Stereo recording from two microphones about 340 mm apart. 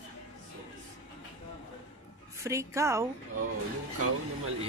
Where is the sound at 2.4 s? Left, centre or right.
Centre.